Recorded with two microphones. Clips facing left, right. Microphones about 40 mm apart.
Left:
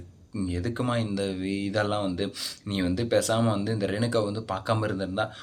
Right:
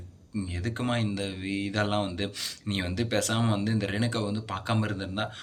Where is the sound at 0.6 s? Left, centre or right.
Right.